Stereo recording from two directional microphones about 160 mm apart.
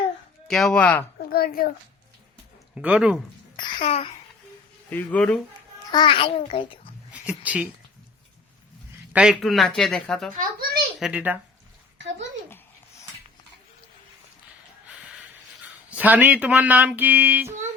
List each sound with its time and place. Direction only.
0.4 s speech: centre (ahead or behind)
1.3 s a child's voice: 70° left (ahead or behind)
2.7 s speech: 10° right (ahead or behind)
3.6 s babbling: 30° left (ahead or behind)
3.8 s a child's voice: 40° left (ahead or behind)
4.9 s speech: 10° left (ahead or behind)
5.9 s a child's voice: 30° left (ahead or behind)
7.1 s speech: 10° right (ahead or behind)
9.1 s speech: 5° right (ahead or behind)
10.3 s a child's voice: 65° right (ahead or behind)
11.0 s speech: 10° right (ahead or behind)
15.9 s speech: 10° right (ahead or behind)